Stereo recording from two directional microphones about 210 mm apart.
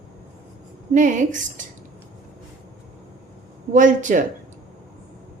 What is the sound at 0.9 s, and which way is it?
Speech, 35° right (ahead or behind).